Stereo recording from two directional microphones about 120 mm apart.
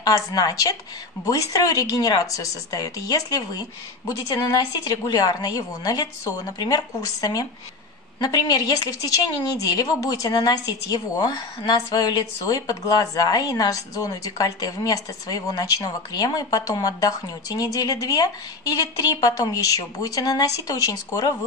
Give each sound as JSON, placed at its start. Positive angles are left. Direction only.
{"t": 0.0, "sound": "a woman's voice", "side_deg": 30}